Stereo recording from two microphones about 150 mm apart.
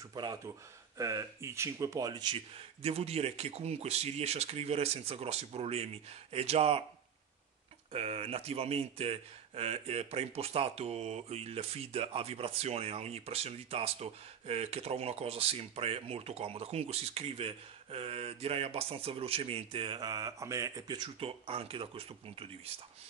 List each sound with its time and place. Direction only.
0.1 s speech: 30° right (ahead or behind)
7.9 s speech: 40° right (ahead or behind)